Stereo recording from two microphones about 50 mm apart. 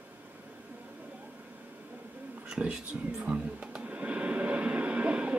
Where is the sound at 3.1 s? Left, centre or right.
Right.